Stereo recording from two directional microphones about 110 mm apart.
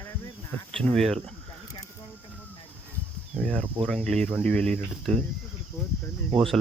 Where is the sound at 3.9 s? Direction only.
5° left (ahead or behind).